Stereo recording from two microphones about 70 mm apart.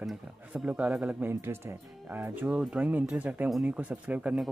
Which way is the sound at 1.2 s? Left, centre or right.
Right.